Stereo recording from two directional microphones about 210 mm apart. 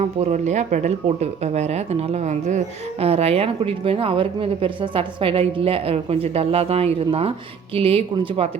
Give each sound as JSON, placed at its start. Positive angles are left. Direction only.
{"t": 0.0, "sound": "speech", "side_deg": -30}